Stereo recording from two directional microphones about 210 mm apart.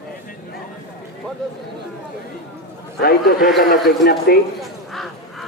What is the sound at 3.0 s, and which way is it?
A man's voice, 45° left (ahead or behind).